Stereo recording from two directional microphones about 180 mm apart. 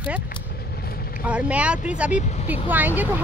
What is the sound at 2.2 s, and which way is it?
Speech, 40° left (ahead or behind).